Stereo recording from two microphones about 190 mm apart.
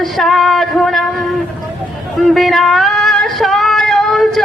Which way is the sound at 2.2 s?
Centre (ahead or behind).